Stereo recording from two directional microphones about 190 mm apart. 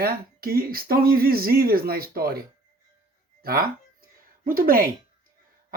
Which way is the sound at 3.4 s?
50° right (ahead or behind).